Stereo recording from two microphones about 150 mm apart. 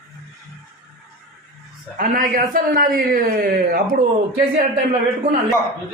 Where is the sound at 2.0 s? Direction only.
70° right (ahead or behind); by 4.0 s 85° right.